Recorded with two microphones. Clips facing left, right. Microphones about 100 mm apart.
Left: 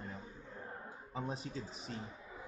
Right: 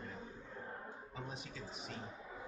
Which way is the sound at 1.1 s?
35° left (ahead or behind).